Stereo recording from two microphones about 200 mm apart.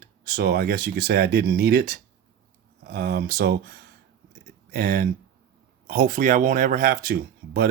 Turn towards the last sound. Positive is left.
turn(degrees=-45)  # may be behind; listen again after turning